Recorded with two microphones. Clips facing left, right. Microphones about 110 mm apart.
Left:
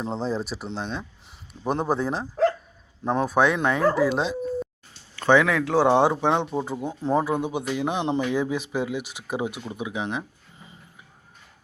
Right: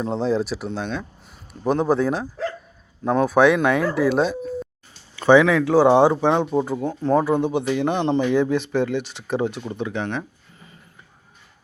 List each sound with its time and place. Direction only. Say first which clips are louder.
0.0 s speech: right 6 dB; centre (ahead or behind)
3.9 s speech: right 3 dB; 20° left (ahead or behind)
5.1 s speech: right 5 dB; 10° right (ahead or behind); by 10.2 s 10° left (ahead or behind)